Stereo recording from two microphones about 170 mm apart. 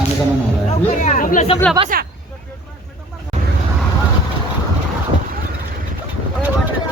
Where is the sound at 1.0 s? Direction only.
50° left (ahead or behind).